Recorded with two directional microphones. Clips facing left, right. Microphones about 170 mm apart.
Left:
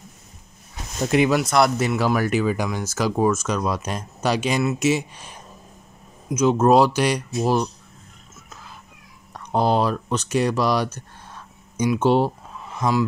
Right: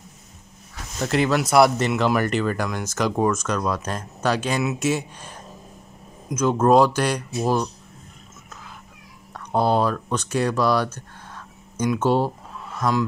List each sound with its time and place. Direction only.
1.0 s speech: 15° left (ahead or behind)
1.3 s speech: 5° right (ahead or behind); by 7.7 s 15° left (ahead or behind)
9.3 s speech: 15° left (ahead or behind)
11.0 s a sound: 10° left (ahead or behind)
12.7 s speech: 10° left (ahead or behind)